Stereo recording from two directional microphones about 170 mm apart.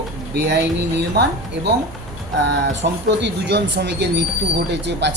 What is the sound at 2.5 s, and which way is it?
Speech, 90° right.